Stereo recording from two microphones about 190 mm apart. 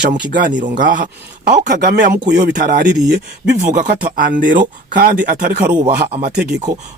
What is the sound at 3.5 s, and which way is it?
Speech, 45° right (ahead or behind).